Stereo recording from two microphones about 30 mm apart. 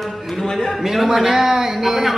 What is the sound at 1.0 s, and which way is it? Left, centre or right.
A man's voice, centre.